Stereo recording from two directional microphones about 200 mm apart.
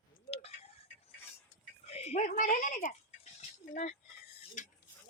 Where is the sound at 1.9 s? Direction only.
30° left (ahead or behind).